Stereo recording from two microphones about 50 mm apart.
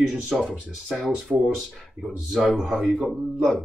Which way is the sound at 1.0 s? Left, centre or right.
Right.